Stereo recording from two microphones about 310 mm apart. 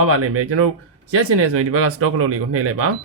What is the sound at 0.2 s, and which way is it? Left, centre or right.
Speech, right.